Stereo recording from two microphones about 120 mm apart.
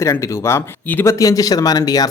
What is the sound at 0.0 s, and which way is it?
Speech, 20° left (ahead or behind).